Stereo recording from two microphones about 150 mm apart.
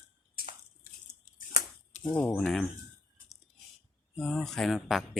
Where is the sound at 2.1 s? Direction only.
10° left (ahead or behind).